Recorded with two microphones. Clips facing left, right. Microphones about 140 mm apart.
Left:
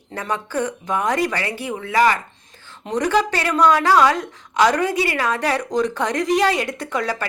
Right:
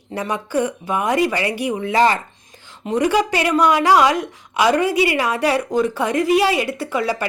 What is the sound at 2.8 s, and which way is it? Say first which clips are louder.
A woman's voice: right 2 dB; 10° right (ahead or behind).